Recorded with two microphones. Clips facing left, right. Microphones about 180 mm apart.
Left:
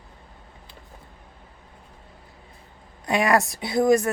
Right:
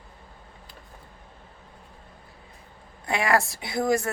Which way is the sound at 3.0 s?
20° left (ahead or behind).